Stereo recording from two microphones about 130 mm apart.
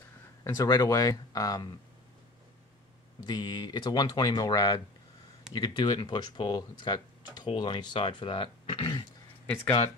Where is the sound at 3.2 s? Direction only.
30° left (ahead or behind).